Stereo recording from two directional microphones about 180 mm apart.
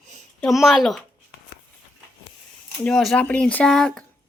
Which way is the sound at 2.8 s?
Centre (ahead or behind).